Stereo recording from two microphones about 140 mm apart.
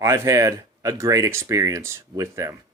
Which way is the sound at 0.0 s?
20° right (ahead or behind).